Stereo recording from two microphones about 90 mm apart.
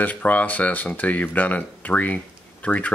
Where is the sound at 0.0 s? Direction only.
15° left (ahead or behind).